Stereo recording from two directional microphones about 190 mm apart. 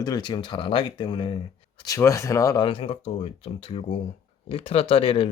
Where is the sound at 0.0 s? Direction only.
20° left (ahead or behind).